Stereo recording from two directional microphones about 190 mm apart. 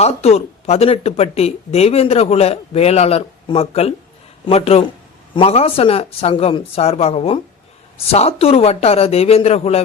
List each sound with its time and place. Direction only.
0.0 s speech: 35° left (ahead or behind)